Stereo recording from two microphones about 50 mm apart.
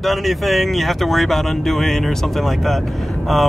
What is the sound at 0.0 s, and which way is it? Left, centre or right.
Speech, centre.